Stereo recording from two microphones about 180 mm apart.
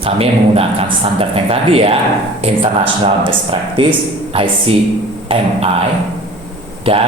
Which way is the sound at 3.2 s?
30° right (ahead or behind).